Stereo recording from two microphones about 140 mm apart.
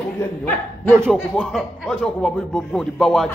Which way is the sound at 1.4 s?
Centre (ahead or behind).